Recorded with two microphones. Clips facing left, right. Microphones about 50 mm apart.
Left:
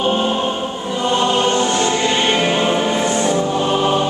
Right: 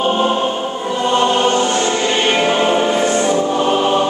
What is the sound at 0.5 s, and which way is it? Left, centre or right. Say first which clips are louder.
Choir: right 2 dB; centre.